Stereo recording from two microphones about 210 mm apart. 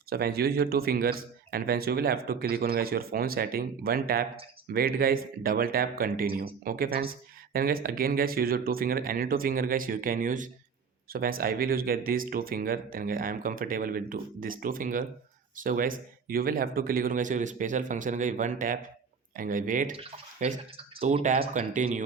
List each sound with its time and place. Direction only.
0.1 s speech: 45° right (ahead or behind)